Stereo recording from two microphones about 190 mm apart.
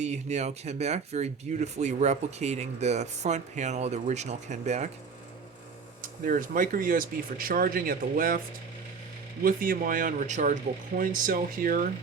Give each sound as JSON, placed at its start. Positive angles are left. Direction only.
{"t": 0.0, "sound": "speech", "side_deg": -35}
{"t": 6.0, "sound": "speech", "side_deg": -45}
{"t": 9.4, "sound": "speech", "side_deg": -50}